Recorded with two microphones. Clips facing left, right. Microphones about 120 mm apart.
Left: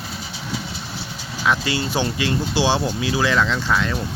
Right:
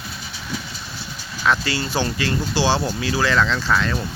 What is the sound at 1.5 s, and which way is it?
Speech, 20° left (ahead or behind).